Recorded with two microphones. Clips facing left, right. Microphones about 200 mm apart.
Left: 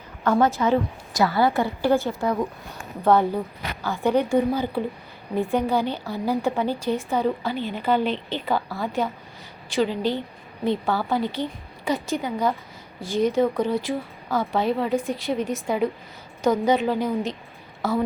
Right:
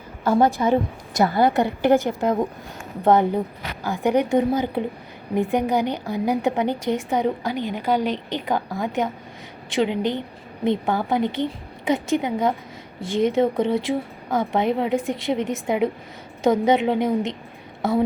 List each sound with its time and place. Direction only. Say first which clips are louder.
0.3 s a woman's voice: right 2 dB; 15° right (ahead or behind)